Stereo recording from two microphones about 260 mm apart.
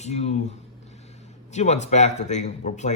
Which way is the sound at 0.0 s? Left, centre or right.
Left.